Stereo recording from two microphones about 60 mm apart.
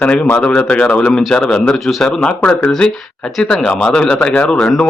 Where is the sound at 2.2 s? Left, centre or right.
Centre.